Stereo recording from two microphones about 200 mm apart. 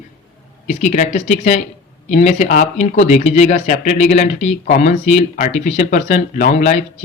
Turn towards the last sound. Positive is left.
turn(degrees=40)  # may be behind; listen again after turning